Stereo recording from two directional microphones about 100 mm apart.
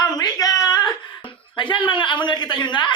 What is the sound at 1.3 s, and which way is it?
Speech, 55° left (ahead or behind).